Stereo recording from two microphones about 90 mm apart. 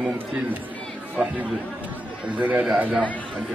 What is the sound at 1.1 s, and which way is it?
Speech, 15° right (ahead or behind).